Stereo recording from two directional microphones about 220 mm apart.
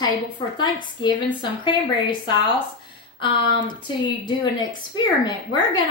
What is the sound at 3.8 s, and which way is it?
A woman's voice, 20° left (ahead or behind).